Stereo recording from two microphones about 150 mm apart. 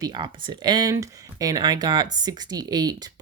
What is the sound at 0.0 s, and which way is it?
Speech, 30° right (ahead or behind).